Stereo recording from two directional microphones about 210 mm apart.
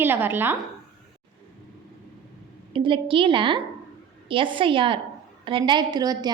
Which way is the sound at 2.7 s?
25° right (ahead or behind).